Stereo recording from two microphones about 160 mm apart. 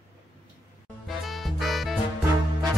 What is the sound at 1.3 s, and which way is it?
Music, centre (ahead or behind).